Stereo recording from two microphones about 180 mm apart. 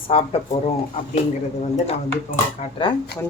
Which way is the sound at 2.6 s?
30° left (ahead or behind).